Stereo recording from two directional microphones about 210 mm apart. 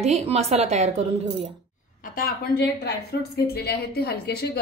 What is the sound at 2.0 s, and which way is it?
A woman's voice, 40° left (ahead or behind).